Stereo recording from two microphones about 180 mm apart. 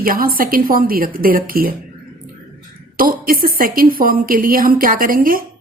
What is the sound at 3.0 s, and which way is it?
A woman's voice, 50° right (ahead or behind).